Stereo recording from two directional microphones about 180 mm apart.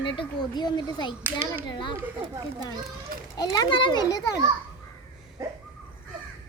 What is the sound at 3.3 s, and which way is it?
Speech, 20° left (ahead or behind).